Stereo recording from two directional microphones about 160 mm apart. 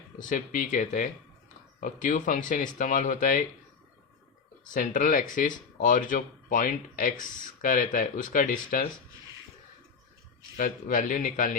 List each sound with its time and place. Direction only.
0.2 s speech: 55° left (ahead or behind)
4.6 s speech: 55° left (ahead or behind)
10.6 s speech: 60° left (ahead or behind)